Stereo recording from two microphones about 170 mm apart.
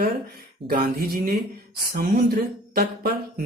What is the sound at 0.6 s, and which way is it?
Speech, 60° right (ahead or behind).